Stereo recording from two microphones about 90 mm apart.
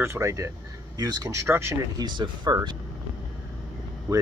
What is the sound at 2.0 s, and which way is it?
Speech, 55° right (ahead or behind).